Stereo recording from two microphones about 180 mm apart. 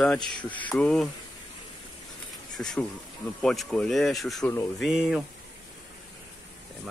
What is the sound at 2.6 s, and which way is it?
Speech, 5° left (ahead or behind).